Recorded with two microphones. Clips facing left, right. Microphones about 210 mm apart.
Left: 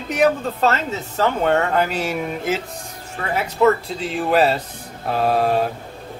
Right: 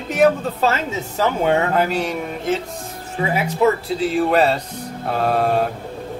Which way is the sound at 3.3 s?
10° right (ahead or behind).